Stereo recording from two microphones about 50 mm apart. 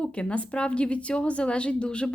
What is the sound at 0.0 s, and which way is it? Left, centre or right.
A woman's voice, left.